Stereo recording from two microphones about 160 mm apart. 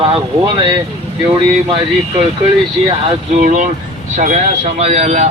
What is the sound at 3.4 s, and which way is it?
Speech, 50° right (ahead or behind).